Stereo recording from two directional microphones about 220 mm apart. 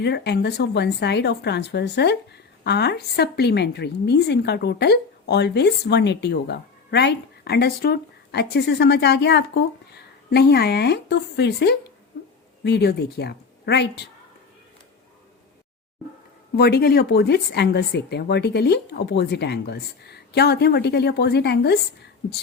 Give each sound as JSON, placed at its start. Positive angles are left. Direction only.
{"t": 0.0, "sound": "speech", "side_deg": 50}
{"t": 12.1, "sound": "a sound", "side_deg": 45}
{"t": 12.6, "sound": "speech", "side_deg": 50}
{"t": 16.6, "sound": "speech", "side_deg": 45}